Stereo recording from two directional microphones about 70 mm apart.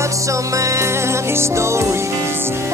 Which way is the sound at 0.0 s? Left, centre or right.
Right.